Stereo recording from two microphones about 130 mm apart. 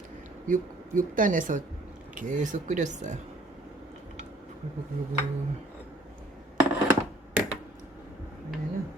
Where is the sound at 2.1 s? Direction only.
75° right (ahead or behind).